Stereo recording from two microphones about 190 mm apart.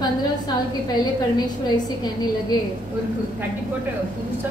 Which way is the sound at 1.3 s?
20° left (ahead or behind).